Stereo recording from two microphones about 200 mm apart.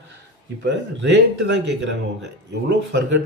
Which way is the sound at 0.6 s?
60° right (ahead or behind).